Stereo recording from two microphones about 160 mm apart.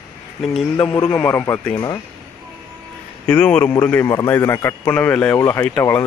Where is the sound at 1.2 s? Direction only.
10° left (ahead or behind).